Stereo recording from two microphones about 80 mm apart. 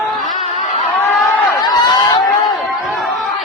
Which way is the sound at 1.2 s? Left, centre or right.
Left.